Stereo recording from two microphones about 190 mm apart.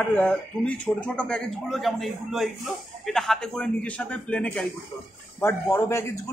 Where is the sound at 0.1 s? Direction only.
5° left (ahead or behind).